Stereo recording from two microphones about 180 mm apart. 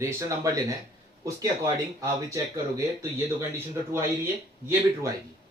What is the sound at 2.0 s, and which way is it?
Speech, 15° right (ahead or behind).